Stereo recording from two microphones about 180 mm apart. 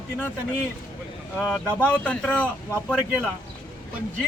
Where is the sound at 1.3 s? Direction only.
5° left (ahead or behind).